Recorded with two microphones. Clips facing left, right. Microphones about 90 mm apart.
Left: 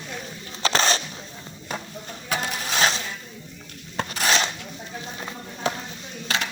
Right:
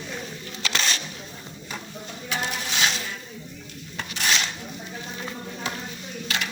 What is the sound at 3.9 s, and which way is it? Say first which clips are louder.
Rub: left 4 dB; 40° left (ahead or behind).